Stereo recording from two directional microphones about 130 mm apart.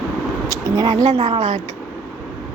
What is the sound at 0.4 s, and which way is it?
Speech, 30° right (ahead or behind).